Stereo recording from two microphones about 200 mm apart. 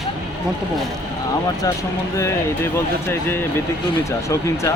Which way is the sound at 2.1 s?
15° left (ahead or behind).